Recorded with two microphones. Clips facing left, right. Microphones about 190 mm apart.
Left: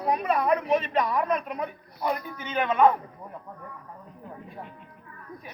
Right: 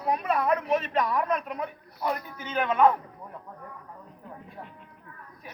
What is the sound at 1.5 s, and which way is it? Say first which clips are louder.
Speech: left 1 dB; 10° left (ahead or behind).